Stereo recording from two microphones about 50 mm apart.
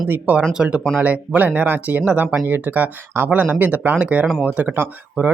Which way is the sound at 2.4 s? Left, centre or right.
Right.